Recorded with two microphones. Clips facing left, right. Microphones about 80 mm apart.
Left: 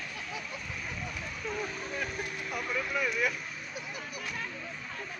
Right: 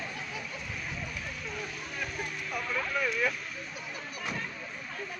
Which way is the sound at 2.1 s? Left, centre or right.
Left.